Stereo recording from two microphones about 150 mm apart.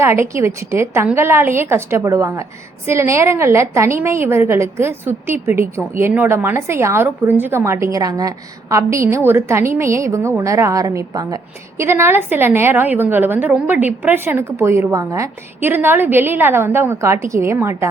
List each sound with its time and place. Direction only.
0.0 s a woman's voice: 15° right (ahead or behind)